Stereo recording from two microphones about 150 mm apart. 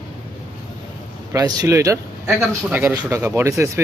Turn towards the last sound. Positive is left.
turn(degrees=-20)  # may be behind; listen again after turning